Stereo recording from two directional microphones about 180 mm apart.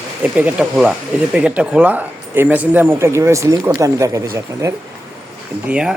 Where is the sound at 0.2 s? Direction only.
5° right (ahead or behind).